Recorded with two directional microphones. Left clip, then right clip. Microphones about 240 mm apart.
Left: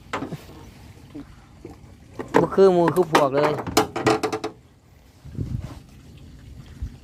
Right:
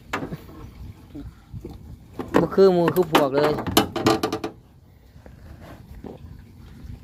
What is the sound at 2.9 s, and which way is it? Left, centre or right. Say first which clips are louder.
Speech: left 1 dB; centre.